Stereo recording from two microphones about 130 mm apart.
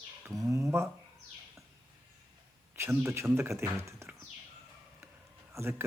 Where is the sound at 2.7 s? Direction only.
20° right (ahead or behind).